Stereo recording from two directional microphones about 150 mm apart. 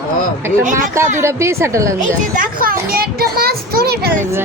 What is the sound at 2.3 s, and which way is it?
A child's voice, 70° right (ahead or behind).